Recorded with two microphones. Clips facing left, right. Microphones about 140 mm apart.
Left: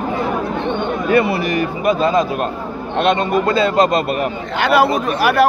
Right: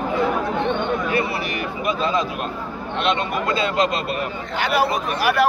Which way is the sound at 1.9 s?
45° left (ahead or behind).